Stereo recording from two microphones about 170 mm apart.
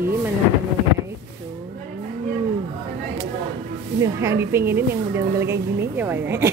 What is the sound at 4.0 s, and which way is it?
A woman's voice, 15° right (ahead or behind).